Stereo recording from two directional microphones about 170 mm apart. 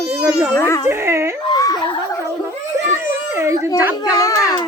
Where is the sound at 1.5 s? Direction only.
20° left (ahead or behind).